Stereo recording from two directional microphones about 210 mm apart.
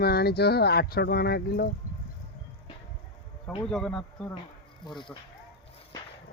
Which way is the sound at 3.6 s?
5° left (ahead or behind).